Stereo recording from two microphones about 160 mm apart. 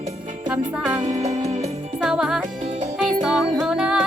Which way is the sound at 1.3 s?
40° right (ahead or behind).